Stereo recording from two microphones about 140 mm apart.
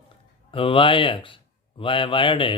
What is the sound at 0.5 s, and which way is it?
Speech, 40° left (ahead or behind).